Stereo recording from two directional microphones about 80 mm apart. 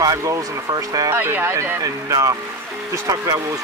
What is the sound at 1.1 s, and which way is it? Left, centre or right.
Speech, right.